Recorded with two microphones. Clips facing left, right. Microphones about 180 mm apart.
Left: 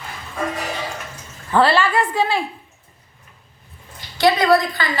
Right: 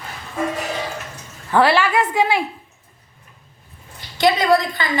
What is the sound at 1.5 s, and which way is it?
Speech, 10° right (ahead or behind).